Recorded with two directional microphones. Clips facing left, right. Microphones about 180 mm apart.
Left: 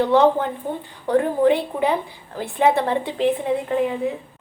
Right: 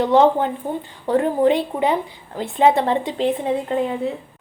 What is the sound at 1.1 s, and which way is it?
A woman's voice, 20° right (ahead or behind).